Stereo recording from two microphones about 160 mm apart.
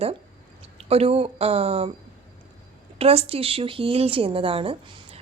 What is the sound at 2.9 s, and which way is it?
Speech, 40° right (ahead or behind).